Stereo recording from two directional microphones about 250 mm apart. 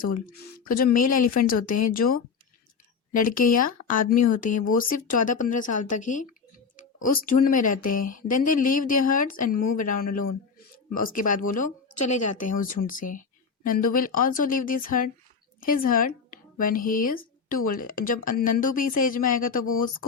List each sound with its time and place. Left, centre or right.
0.3 s speech: left
9.8 s speech: left
11.0 s speech: left